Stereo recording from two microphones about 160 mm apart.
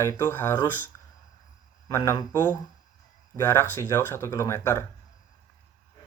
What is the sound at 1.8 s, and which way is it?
Speech, 20° left (ahead or behind).